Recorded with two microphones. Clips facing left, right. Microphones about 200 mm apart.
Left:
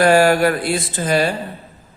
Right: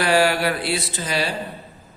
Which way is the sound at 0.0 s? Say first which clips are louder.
Left 6 dB; 45° left (ahead or behind).